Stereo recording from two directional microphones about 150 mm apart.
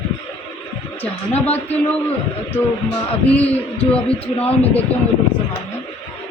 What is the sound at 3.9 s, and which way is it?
Speech, 10° left (ahead or behind).